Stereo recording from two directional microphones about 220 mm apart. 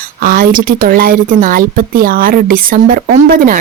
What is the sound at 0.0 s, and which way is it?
Speech, 40° right (ahead or behind).